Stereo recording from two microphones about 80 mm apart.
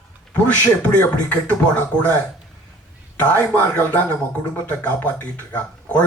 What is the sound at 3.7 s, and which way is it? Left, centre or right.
Speech, centre.